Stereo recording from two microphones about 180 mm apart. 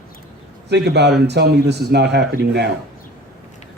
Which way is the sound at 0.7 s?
70° right (ahead or behind).